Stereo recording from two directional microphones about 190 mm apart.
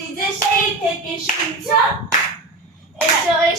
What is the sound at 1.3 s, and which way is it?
Clapping, 40° left (ahead or behind).